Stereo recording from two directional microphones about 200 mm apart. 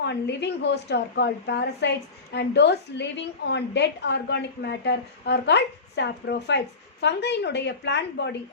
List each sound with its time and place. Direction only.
0.0 s a woman's voice: 55° left (ahead or behind)